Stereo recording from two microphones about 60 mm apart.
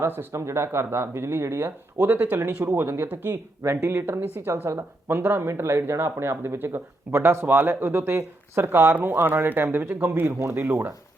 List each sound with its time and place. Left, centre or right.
0.0 s speech: right
0.3 s speech: right
2.5 s speech: centre
2.7 s speech: right
3.7 s speech: right